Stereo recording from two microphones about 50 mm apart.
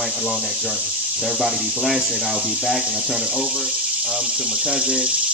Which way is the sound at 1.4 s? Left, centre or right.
Centre.